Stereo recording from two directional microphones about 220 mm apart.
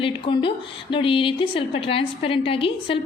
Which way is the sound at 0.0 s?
25° left (ahead or behind).